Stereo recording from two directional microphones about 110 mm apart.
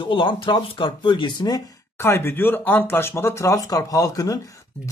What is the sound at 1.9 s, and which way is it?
Speech, 20° left (ahead or behind).